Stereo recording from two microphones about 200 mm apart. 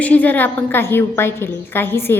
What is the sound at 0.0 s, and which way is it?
A woman's voice, 10° left (ahead or behind).